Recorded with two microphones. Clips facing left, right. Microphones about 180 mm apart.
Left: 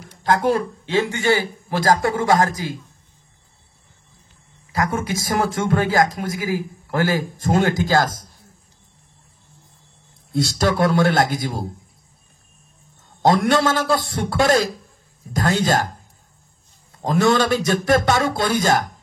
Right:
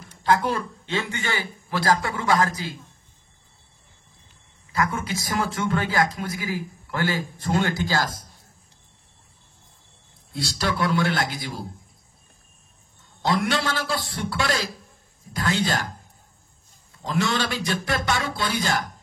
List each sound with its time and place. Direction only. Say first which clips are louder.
0.2 s a man's voice: left 4 dB; 45° left (ahead or behind)
5.1 s a man's voice: left 5 dB; 45° left (ahead or behind)
10.3 s a man's voice: left 7 dB; 45° left (ahead or behind)
13.2 s a man's voice: left 7 dB; 45° left (ahead or behind)
17.0 s a man's voice: left 8 dB; 45° left (ahead or behind)